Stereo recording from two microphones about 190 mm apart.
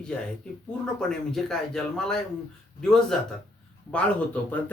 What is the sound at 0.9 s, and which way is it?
Speech, 5° left (ahead or behind).